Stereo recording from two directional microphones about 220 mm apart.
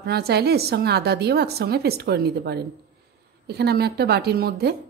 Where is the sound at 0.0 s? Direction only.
45° right (ahead or behind).